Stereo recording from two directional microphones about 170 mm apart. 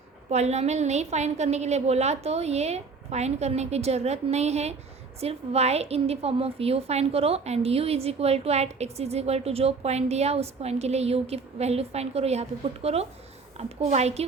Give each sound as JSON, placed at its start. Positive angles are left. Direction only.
{"t": 0.3, "sound": "a woman's voice", "side_deg": -40}